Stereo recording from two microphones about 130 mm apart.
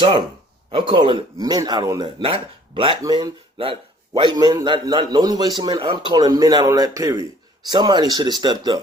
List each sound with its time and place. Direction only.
0.7 s a man's voice: 35° right (ahead or behind)
3.0 s speech: 30° right (ahead or behind)
3.6 s a man's voice: 40° right (ahead or behind); by 7.3 s 25° right (ahead or behind)
7.7 s a man's voice: 35° right (ahead or behind)